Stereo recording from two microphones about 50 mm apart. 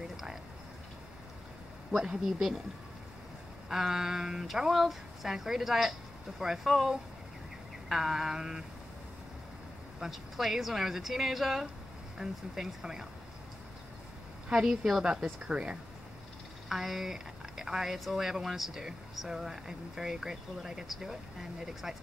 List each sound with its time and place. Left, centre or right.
2.0 s speech: centre
3.6 s speech: centre
9.9 s speech: centre
14.5 s speech: centre
15.4 s speech: right
16.6 s speech: centre